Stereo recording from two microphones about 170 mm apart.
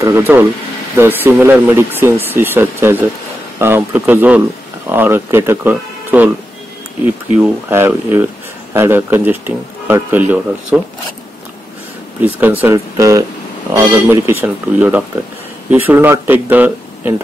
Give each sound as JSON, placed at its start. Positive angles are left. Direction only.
{"t": 0.0, "sound": "speech", "side_deg": -15}
{"t": 7.3, "sound": "speech", "side_deg": -15}
{"t": 12.2, "sound": "speech", "side_deg": -10}